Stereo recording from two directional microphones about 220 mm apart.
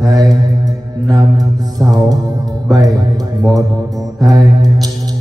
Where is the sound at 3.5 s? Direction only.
15° right (ahead or behind).